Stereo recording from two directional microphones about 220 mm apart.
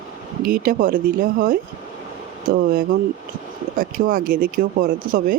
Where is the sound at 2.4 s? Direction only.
40° right (ahead or behind).